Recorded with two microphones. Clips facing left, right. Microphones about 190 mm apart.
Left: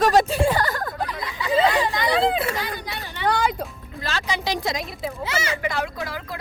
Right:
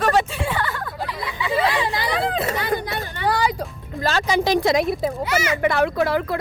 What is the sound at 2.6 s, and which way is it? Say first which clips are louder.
Chatter: right 6 dB; 55° right (ahead or behind).